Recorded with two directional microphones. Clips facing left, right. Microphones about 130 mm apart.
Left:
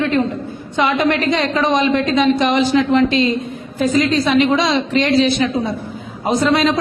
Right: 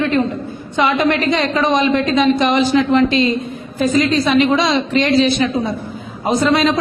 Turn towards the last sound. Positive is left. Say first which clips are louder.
# right 1 dB
turn(degrees=-20)  # may be behind; listen again after turning